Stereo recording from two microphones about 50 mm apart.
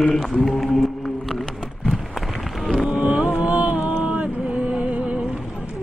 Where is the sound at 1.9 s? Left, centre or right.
Centre.